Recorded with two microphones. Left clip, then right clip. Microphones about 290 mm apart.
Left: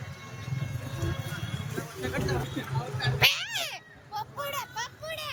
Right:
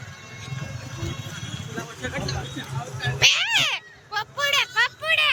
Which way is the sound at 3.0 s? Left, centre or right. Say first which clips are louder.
Right 6 dB; centre.